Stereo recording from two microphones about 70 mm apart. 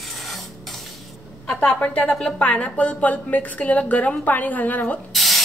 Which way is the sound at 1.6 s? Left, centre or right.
Centre.